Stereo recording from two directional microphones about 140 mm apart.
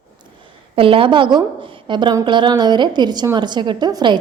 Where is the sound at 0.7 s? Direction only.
40° right (ahead or behind).